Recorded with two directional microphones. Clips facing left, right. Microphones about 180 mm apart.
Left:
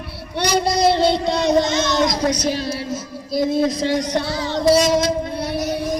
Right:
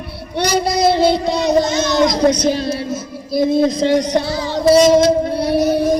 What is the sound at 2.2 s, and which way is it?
Speech, 45° right (ahead or behind).